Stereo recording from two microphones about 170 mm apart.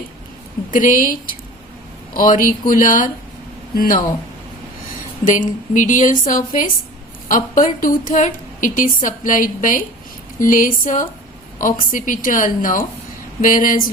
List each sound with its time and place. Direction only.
0.7 s a woman's voice: 50° left (ahead or behind)
5.2 s a woman's voice: 50° left (ahead or behind)